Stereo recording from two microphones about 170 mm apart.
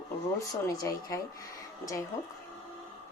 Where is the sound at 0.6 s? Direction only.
20° left (ahead or behind).